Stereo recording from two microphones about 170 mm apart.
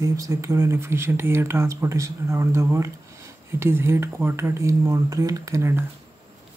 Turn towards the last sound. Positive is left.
turn(degrees=-15)  # may be behind; listen again after turning